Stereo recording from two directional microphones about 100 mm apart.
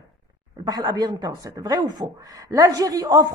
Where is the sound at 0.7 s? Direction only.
40° right (ahead or behind).